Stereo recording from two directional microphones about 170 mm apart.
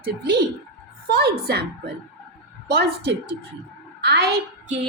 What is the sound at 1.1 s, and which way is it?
A woman's voice, 65° right (ahead or behind).